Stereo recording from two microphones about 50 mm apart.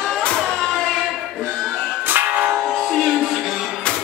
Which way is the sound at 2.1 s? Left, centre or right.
Right.